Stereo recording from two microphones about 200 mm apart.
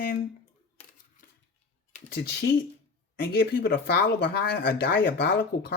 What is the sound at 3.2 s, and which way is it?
Speech, 45° left (ahead or behind).